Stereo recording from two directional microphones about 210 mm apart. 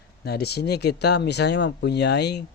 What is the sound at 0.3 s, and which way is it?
Speech, 50° left (ahead or behind).